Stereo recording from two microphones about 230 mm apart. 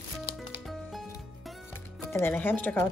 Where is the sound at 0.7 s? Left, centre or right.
Centre.